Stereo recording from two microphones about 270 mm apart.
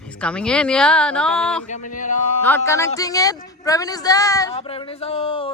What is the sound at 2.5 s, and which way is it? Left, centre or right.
Music, centre.